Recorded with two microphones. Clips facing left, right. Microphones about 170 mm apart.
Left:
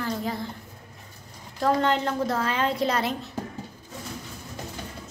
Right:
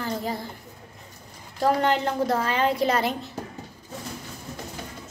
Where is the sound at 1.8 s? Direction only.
5° right (ahead or behind).